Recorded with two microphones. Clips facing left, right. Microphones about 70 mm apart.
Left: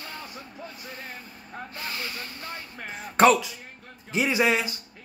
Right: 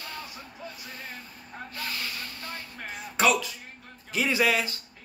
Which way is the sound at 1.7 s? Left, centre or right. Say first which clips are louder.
Even; left.